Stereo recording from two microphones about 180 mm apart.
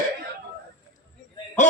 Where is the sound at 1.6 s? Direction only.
45° left (ahead or behind).